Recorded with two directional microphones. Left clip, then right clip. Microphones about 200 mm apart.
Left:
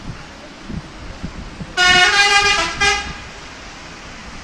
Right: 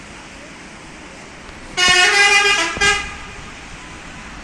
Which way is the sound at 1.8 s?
45° left (ahead or behind).